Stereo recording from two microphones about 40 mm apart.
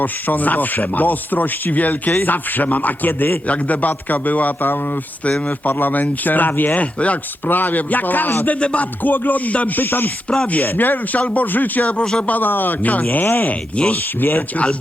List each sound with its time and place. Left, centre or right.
0.0 s speech: left
3.4 s speech: left
6.7 s speech: left
7.4 s speech: left
8.5 s speech: left
9.0 s speech: left
9.5 s speech: left
9.7 s speech: left
11.9 s speech: centre
12.2 s speech: left
12.5 s speech: left
13.5 s speech: left
13.9 s speech: left
14.5 s speech: left